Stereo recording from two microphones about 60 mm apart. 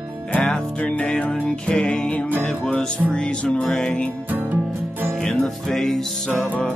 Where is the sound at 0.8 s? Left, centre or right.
Left.